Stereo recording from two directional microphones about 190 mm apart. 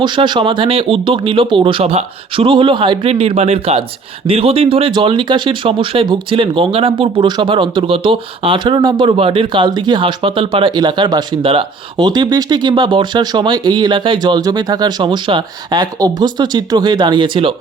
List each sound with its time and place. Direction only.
0.0 s speech: 25° right (ahead or behind)